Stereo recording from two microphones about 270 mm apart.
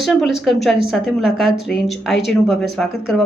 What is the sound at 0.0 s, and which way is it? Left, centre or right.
A woman's voice, centre.